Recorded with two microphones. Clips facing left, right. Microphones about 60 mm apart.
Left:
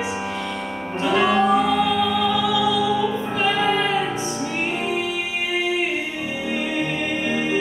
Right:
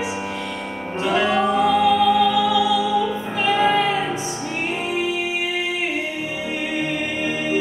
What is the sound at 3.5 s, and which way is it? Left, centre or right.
Music, centre.